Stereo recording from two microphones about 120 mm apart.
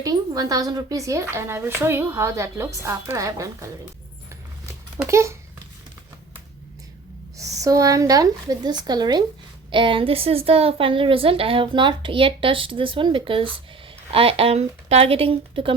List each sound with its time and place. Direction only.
0.0 s speech: 30° right (ahead or behind)
5.0 s speech: 25° right (ahead or behind)
7.3 s a woman's voice: 30° right (ahead or behind)
9.7 s a woman's voice: 45° right (ahead or behind)